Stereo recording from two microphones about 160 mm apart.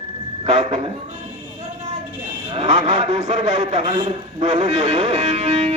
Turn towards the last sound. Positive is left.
turn(degrees=-40)  # may be behind; listen again after turning